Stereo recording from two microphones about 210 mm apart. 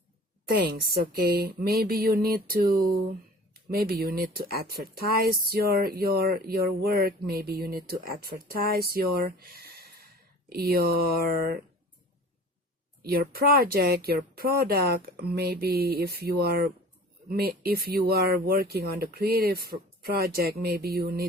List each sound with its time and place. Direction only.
0.4 s speech: 50° right (ahead or behind)
13.0 s speech: 45° right (ahead or behind)